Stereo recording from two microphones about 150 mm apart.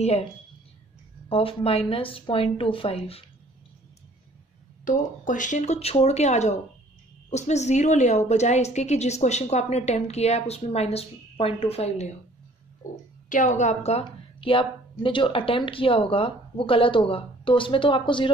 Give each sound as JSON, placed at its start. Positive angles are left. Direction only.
{"t": 0.0, "sound": "a woman's voice", "side_deg": 45}
{"t": 1.3, "sound": "a woman's voice", "side_deg": 40}
{"t": 4.8, "sound": "a woman's voice", "side_deg": 60}
{"t": 13.3, "sound": "a woman's voice", "side_deg": 55}
{"t": 14.0, "sound": "a woman's voice", "side_deg": 35}